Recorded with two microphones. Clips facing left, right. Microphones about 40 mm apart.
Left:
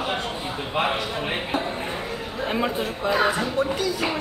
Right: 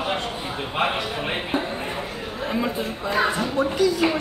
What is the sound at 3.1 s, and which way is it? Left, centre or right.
Speech, centre.